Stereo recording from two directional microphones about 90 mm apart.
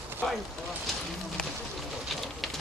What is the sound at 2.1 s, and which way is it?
Bird, centre (ahead or behind).